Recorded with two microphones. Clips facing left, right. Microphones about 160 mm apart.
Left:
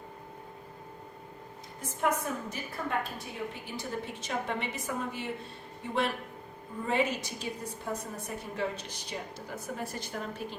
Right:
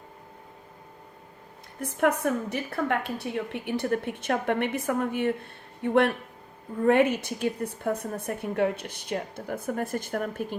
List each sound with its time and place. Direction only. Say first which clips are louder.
1.8 s a woman's voice: right 6 dB; 65° right (ahead or behind)